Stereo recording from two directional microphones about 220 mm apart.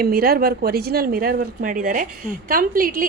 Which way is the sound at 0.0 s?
45° right (ahead or behind).